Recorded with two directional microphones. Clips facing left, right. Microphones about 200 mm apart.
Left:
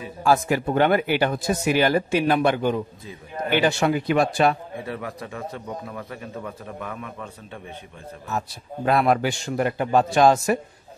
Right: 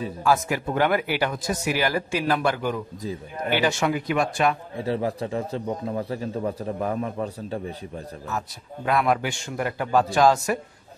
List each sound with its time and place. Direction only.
0.2 s a man's voice: 30° left (ahead or behind)
4.8 s a man's voice: 30° right (ahead or behind)
8.3 s a man's voice: 30° left (ahead or behind)